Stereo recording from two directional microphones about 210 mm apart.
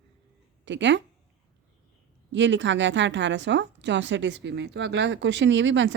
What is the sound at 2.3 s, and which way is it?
A woman's voice, 60° right (ahead or behind).